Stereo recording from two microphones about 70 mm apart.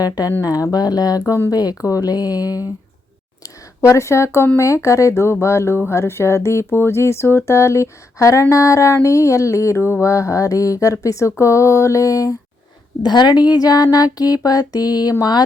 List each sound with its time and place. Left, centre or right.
0.0 s speech: left
3.4 s a sound: left
4.5 s speech: left
13.0 s a woman's voice: left
13.5 s music: left